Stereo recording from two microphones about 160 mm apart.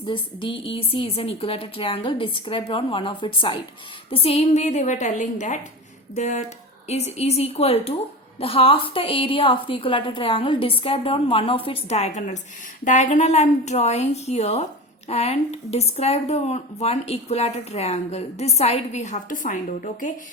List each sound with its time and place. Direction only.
0.1 s a woman's voice: 30° left (ahead or behind); by 20.1 s 55° left (ahead or behind)